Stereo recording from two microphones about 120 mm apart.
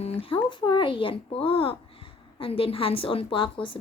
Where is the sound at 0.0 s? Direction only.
50° left (ahead or behind).